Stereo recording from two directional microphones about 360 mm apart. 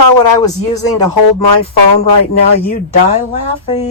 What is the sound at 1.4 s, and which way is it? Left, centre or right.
Speech, left.